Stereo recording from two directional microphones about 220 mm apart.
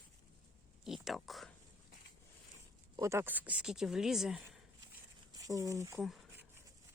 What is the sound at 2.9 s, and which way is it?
Speech, 15° right (ahead or behind).